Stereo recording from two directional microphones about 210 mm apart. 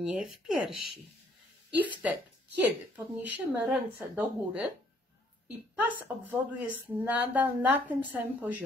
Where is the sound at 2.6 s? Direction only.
5° right (ahead or behind).